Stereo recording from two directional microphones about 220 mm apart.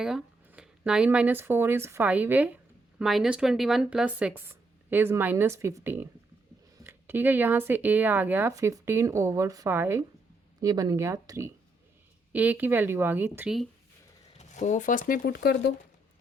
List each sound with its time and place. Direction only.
0.0 s speech: 5° right (ahead or behind)
14.3 s speech: 35° left (ahead or behind)